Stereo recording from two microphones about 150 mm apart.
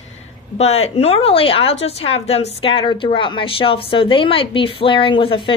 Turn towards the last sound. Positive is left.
turn(degrees=35)  # may be behind; listen again after turning